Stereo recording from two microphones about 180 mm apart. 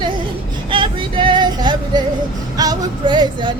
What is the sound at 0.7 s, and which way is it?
Female singing, 30° right (ahead or behind).